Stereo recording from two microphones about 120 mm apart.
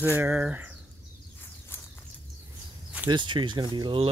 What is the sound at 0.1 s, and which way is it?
Speech, 15° right (ahead or behind).